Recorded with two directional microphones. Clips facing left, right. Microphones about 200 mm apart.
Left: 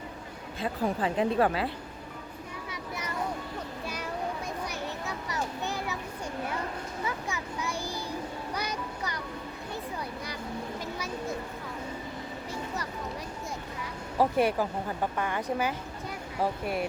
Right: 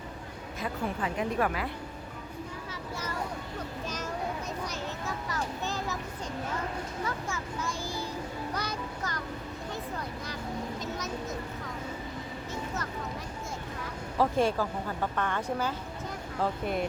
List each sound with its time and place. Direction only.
0.6 s a woman's voice: 30° left (ahead or behind)
5.3 s a sound: 15° left (ahead or behind)
7.3 s a child's voice: 15° left (ahead or behind)
10.8 s vehicle: 10° left (ahead or behind)
14.2 s speech: 15° left (ahead or behind)